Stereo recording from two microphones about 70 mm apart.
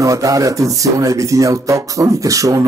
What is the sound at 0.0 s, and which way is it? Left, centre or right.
Speech, right.